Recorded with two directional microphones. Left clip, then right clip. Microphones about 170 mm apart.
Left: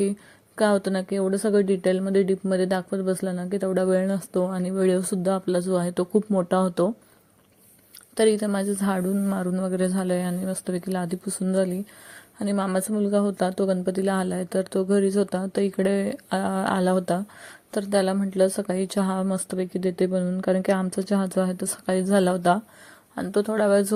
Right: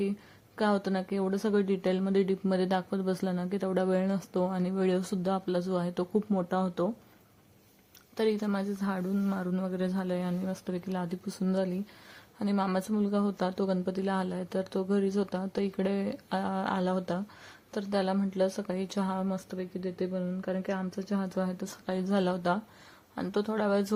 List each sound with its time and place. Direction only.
0.5 s speech: 25° left (ahead or behind)
8.1 s speech: 25° left (ahead or behind)